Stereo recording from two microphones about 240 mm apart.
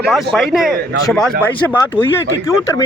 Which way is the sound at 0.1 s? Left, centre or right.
Centre.